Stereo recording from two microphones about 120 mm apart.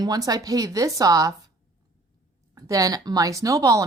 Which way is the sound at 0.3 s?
30° right (ahead or behind).